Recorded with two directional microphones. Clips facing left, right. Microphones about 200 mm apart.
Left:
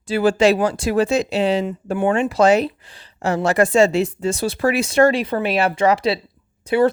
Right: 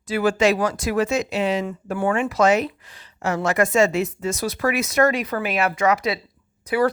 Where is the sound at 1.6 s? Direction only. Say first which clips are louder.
Left 4 dB; 20° left (ahead or behind).